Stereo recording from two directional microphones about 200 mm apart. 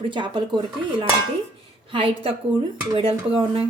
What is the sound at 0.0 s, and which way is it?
A woman's voice, 25° right (ahead or behind).